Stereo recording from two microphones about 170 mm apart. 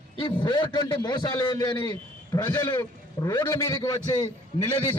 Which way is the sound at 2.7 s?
25° left (ahead or behind).